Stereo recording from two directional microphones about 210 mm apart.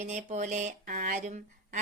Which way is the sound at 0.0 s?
35° right (ahead or behind).